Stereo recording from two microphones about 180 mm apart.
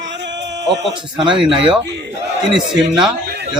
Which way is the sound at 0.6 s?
75° right (ahead or behind).